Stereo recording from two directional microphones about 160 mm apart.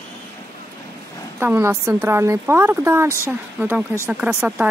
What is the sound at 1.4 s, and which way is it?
Speech, 15° right (ahead or behind).